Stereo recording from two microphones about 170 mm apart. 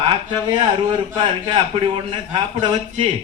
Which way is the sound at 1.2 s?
30° right (ahead or behind).